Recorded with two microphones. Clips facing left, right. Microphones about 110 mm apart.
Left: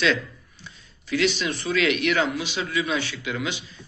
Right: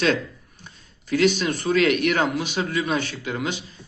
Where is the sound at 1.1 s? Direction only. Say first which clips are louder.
Right 4 dB; 45° right (ahead or behind).